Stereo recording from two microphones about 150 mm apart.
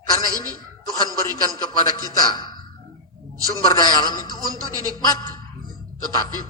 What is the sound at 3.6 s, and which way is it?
A man's voice, 25° left (ahead or behind).